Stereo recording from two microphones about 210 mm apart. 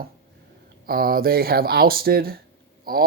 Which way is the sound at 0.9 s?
45° right (ahead or behind).